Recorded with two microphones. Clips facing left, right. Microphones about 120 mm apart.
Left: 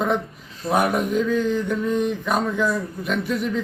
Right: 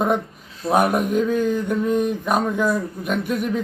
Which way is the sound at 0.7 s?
50° right (ahead or behind).